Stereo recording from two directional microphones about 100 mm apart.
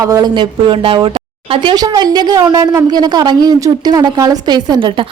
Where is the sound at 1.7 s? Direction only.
40° right (ahead or behind).